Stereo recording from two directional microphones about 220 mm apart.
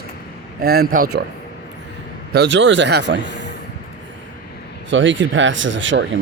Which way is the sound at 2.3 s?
55° right (ahead or behind).